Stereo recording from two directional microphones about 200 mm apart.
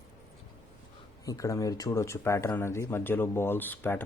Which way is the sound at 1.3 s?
15° left (ahead or behind).